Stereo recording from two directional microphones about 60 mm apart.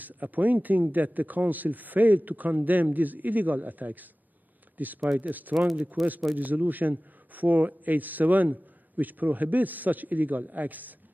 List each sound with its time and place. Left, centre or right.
0.0 s speech: right